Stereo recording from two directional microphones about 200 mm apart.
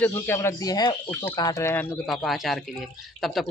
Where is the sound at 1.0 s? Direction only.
10° left (ahead or behind).